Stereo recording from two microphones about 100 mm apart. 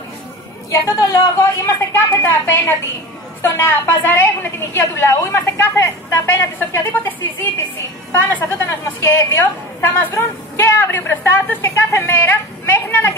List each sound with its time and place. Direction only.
0.7 s a woman's voice: 35° left (ahead or behind)